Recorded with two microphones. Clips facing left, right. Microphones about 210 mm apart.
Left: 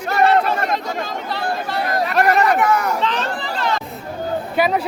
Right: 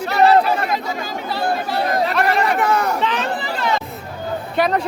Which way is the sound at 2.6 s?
30° right (ahead or behind).